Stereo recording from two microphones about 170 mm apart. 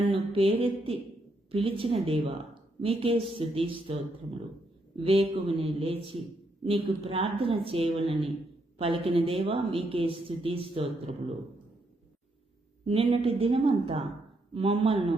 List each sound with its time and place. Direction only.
0.1 s a woman's voice: 35° right (ahead or behind)
5.0 s a woman's voice: 35° right (ahead or behind)
12.8 s a woman's voice: 35° right (ahead or behind)